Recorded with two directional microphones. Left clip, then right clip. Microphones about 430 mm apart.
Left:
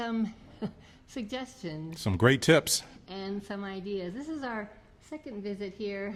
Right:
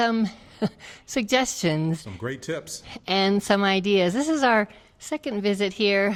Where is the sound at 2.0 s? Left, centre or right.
Left.